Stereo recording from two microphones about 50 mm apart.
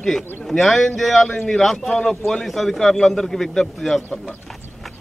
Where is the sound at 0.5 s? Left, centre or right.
Centre.